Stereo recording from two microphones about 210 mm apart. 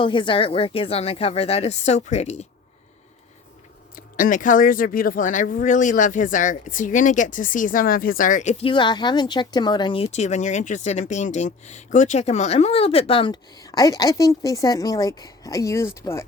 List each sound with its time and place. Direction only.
0.0 s speech: 25° left (ahead or behind)
4.2 s speech: 40° left (ahead or behind); by 16.2 s 15° left (ahead or behind)